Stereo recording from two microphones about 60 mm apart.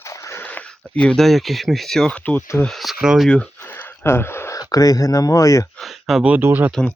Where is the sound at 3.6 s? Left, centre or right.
Left.